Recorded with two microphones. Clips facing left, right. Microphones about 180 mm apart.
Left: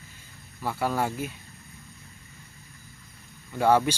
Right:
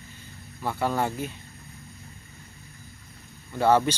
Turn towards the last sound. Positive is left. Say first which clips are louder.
# right 1 dB
turn(degrees=10)  # may be behind; listen again after turning